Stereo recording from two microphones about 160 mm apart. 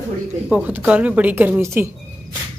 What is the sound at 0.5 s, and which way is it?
Speech, 10° right (ahead or behind).